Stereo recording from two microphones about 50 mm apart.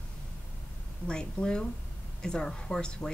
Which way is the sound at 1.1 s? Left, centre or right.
Centre.